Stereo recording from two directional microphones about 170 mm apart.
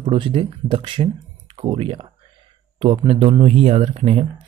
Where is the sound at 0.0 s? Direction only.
30° right (ahead or behind).